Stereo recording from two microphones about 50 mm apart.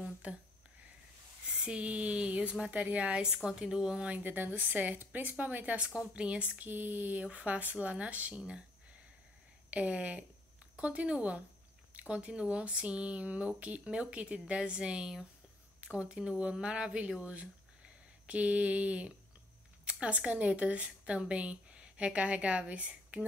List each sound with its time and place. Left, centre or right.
0.0 s a sound: right
1.6 s a sound: right
2.6 s speech: right
3.4 s speech: centre
4.1 s a woman's voice: right
5.9 s speech: right
6.6 s a woman's voice: right; by 8.6 s centre
9.7 s speech: right